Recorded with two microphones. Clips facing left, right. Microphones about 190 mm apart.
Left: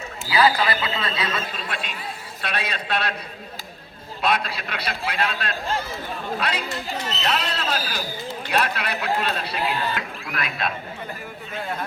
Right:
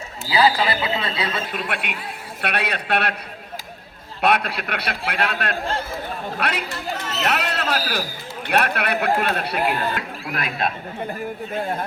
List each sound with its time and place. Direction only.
0.3 s speech: 30° right (ahead or behind)
1.5 s a man's voice: 65° right (ahead or behind)
4.2 s speech: 65° right (ahead or behind)
7.2 s a sound: 65° right (ahead or behind)
8.4 s speech: 60° right (ahead or behind)